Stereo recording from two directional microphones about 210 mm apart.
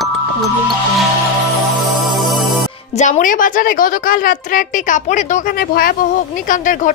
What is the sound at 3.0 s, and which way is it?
A woman's voice, 35° left (ahead or behind).